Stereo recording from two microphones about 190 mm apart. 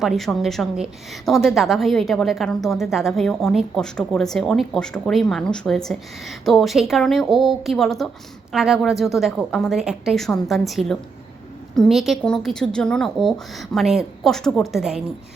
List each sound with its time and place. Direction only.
0.0 s a woman's voice: centre (ahead or behind)